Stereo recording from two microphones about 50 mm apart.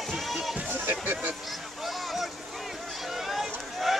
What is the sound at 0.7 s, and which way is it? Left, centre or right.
Music, right.